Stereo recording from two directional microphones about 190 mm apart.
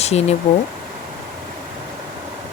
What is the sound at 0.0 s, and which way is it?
Speech, 35° left (ahead or behind).